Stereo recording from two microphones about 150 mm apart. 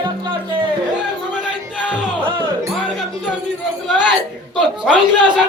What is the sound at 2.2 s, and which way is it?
Music, 30° right (ahead or behind).